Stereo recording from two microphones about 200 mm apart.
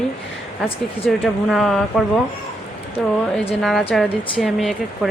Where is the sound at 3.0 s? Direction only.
Centre (ahead or behind).